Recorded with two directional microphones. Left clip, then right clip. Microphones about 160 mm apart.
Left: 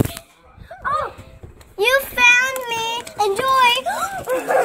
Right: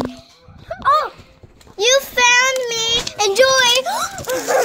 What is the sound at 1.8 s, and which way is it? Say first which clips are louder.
Child singing: right 1 dB; 20° right (ahead or behind).